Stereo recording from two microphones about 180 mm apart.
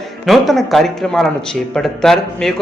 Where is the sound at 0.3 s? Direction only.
Centre (ahead or behind).